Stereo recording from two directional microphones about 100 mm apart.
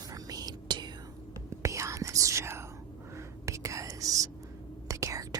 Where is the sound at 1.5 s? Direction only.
30° right (ahead or behind).